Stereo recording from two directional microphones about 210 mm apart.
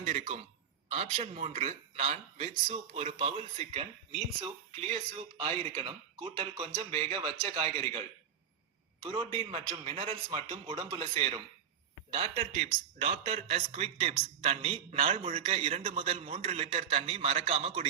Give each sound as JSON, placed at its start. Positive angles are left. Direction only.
{"t": 0.0, "sound": "speech", "side_deg": -30}